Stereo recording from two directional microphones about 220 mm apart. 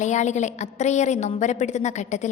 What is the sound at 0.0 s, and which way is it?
A woman's voice, 35° left (ahead or behind).